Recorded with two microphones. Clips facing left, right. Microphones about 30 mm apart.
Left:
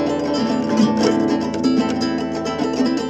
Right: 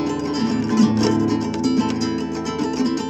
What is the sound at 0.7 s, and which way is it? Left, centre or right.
Music, centre.